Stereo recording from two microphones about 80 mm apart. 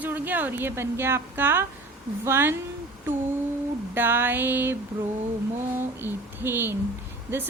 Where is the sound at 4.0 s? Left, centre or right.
Right.